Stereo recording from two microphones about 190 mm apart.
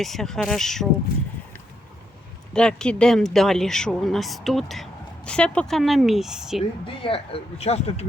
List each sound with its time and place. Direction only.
0.0 s speech: centre (ahead or behind)
2.5 s speech: 5° left (ahead or behind)
6.6 s speech: 30° left (ahead or behind)